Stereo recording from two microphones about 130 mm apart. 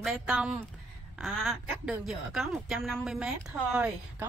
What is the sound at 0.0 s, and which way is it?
A woman's voice, 5° right (ahead or behind).